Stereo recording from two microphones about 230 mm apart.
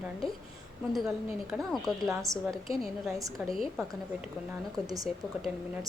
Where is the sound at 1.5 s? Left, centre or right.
Centre.